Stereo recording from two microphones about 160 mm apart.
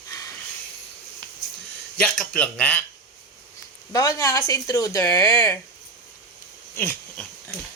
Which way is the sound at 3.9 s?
20° left (ahead or behind).